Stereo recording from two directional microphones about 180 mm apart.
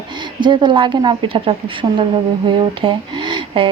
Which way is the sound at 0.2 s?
25° right (ahead or behind).